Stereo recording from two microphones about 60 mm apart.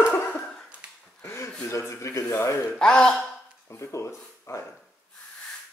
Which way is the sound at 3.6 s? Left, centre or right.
Left.